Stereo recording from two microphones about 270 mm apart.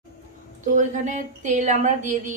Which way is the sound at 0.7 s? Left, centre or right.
Right.